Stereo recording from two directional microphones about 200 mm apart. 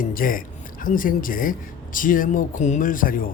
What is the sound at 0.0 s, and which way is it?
Speech, 45° left (ahead or behind).